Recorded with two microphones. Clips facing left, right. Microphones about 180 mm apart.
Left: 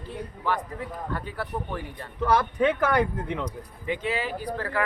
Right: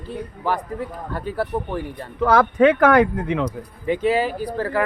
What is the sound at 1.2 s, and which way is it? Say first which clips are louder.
Speech: right 8 dB; 35° right (ahead or behind).